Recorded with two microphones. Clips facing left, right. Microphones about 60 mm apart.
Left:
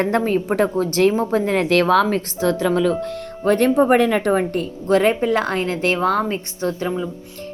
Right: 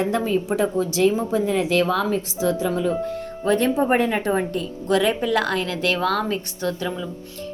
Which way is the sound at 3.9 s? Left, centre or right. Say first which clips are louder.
Left 4 dB; left.